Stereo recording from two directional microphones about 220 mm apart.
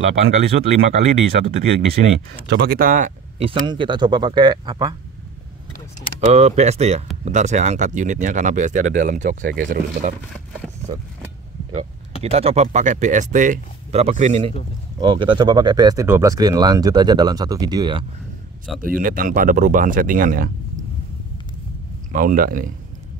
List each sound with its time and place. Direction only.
0.2 s speech: 30° right (ahead or behind)
2.4 s speech: 45° right (ahead or behind)
3.3 s speech: 25° right (ahead or behind)
6.3 s speech: 30° right (ahead or behind)
12.2 s speech: 25° right (ahead or behind)
18.8 s speech: 40° right (ahead or behind)
22.1 s speech: 40° right (ahead or behind)